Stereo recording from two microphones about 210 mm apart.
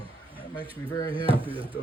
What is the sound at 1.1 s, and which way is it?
Speech, 25° right (ahead or behind).